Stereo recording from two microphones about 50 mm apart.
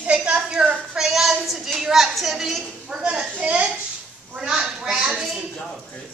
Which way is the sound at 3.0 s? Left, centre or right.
Centre.